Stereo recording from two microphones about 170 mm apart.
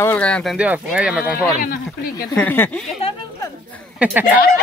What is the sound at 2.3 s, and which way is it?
Speech, 10° left (ahead or behind).